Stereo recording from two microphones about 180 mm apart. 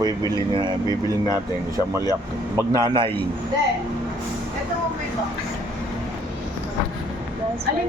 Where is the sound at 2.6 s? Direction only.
20° right (ahead or behind).